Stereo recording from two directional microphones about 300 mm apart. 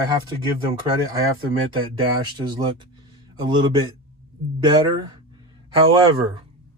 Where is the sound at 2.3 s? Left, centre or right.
Centre.